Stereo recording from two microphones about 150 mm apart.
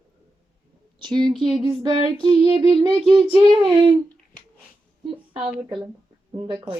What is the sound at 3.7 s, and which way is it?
Child singing, 25° right (ahead or behind).